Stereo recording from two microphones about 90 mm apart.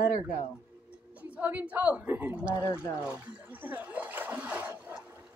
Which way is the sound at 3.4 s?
20° right (ahead or behind).